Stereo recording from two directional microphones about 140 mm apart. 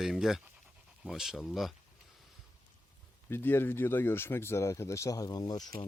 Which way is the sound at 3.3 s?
15° left (ahead or behind).